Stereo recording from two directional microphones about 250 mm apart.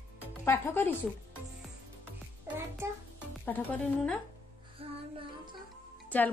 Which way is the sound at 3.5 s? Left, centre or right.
Centre.